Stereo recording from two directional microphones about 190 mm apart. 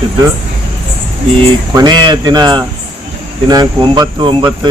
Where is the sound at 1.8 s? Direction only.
20° right (ahead or behind).